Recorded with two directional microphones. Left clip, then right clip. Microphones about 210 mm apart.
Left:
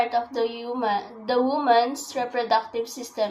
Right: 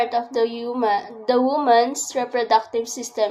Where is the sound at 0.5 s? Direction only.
55° right (ahead or behind).